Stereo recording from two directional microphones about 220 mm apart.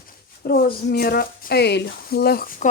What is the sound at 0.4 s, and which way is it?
Speech, 45° left (ahead or behind).